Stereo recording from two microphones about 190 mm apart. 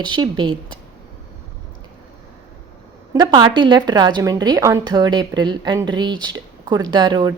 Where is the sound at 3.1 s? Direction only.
20° right (ahead or behind).